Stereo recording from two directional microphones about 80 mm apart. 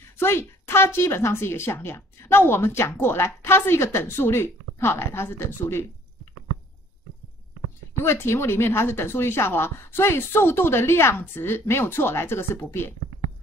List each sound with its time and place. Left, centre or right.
0.2 s a woman's voice: left
8.0 s a woman's voice: left